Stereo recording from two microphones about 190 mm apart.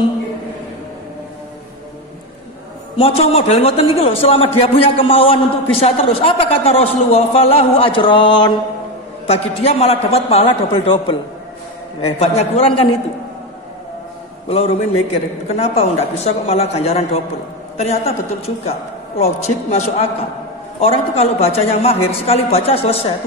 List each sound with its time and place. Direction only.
3.0 s a man's voice: 30° left (ahead or behind)
14.5 s a man's voice: 30° left (ahead or behind)